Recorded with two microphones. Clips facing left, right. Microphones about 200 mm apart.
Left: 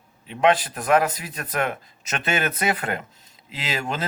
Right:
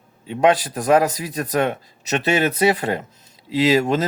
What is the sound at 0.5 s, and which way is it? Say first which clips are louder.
Speech: right 4 dB; 40° right (ahead or behind).